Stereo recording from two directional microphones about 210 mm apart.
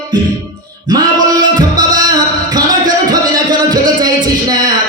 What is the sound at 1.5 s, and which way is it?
Music, 20° right (ahead or behind).